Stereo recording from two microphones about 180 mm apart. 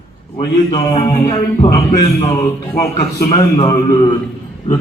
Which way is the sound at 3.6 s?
20° left (ahead or behind).